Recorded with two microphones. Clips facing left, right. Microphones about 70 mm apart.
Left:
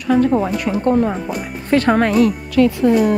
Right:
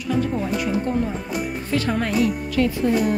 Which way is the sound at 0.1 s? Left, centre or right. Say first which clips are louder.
Left 8 dB; left.